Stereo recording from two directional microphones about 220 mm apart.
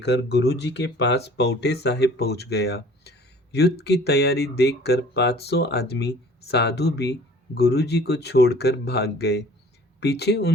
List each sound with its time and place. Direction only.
0.0 s speech: 50° left (ahead or behind)